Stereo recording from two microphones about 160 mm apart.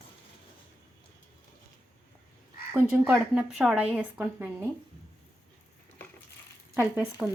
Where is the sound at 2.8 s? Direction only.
10° right (ahead or behind).